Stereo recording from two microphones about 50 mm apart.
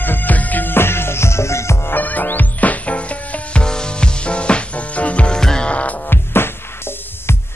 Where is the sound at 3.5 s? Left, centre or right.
Centre.